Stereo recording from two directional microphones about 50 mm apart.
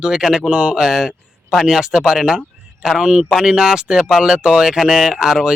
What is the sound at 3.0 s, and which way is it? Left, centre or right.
Speech, right.